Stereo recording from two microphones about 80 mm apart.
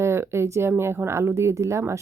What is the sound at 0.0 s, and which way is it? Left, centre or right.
Speech, right.